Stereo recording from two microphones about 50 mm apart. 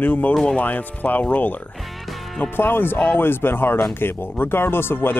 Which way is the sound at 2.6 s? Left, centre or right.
Left.